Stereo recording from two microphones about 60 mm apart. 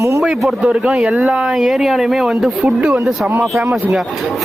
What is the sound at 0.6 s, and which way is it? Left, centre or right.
Speech, centre.